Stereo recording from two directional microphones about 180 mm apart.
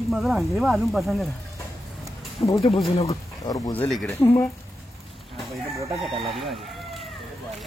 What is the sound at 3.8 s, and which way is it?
Speech, centre (ahead or behind).